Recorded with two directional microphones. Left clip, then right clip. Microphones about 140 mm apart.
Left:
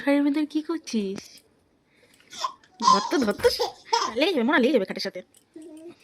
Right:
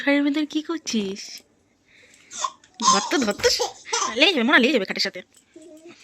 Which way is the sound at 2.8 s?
Centre (ahead or behind).